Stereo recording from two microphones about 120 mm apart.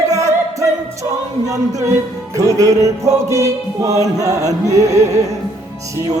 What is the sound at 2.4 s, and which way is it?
Music, 25° right (ahead or behind).